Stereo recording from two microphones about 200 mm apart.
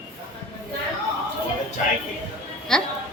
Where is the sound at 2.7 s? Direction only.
Centre (ahead or behind).